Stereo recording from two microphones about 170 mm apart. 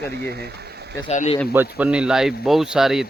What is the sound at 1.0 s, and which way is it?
Speech, 40° left (ahead or behind).